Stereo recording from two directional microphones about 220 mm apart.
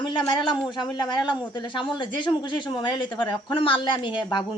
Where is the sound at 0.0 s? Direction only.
20° left (ahead or behind).